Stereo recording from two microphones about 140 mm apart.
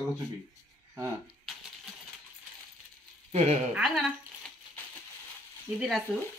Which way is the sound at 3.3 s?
55° right (ahead or behind).